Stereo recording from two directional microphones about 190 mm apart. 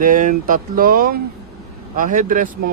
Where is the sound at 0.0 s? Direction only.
45° right (ahead or behind).